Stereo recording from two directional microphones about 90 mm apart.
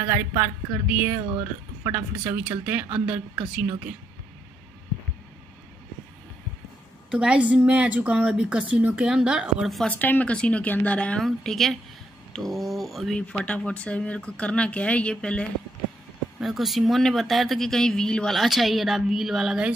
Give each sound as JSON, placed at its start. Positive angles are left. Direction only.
{"t": 0.0, "sound": "a woman's voice", "side_deg": -25}
{"t": 7.1, "sound": "a woman's voice", "side_deg": -10}
{"t": 9.8, "sound": "speech", "side_deg": 20}
{"t": 11.2, "sound": "speech", "side_deg": 0}
{"t": 13.3, "sound": "speech", "side_deg": 10}
{"t": 16.3, "sound": "speech", "side_deg": 0}